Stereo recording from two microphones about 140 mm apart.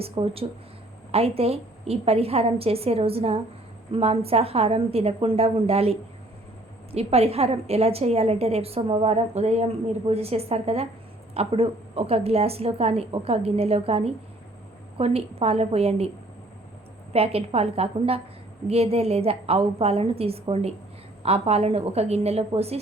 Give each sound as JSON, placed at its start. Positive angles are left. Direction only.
{"t": 0.0, "sound": "speech", "side_deg": -45}
{"t": 17.1, "sound": "speech", "side_deg": -45}